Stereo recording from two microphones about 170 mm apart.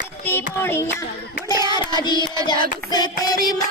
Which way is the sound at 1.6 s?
25° left (ahead or behind).